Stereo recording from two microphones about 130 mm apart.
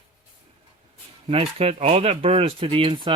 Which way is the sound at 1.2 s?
50° right (ahead or behind).